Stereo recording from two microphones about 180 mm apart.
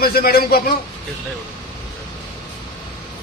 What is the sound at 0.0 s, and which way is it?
Speech, 60° left (ahead or behind).